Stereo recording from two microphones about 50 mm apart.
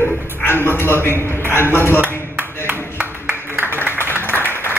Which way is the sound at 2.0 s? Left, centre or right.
Right.